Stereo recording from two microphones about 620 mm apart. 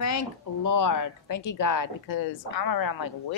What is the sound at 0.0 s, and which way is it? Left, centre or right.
A woman's voice, left.